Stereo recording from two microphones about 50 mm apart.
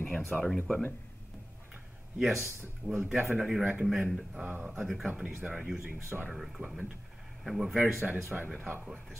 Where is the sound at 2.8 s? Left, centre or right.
Centre.